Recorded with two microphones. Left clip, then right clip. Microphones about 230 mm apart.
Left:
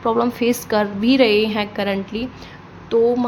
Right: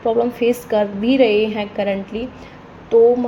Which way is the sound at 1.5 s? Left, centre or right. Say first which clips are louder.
Right 1 dB; left.